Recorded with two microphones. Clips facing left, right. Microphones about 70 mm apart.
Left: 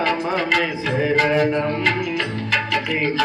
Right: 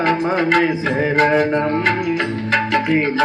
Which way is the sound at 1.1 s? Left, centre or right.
Right.